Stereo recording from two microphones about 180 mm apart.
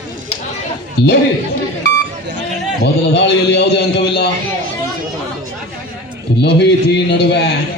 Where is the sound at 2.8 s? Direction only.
70° left (ahead or behind).